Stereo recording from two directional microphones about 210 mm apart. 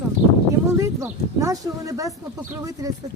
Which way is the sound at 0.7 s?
15° right (ahead or behind).